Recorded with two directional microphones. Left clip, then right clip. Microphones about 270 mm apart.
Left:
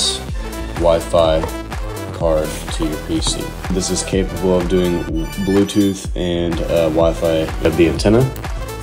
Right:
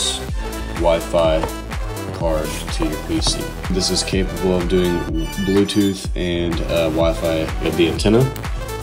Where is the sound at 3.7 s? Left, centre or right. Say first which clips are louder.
Even; centre.